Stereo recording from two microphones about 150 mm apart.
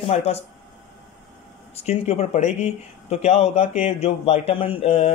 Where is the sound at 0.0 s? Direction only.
45° left (ahead or behind).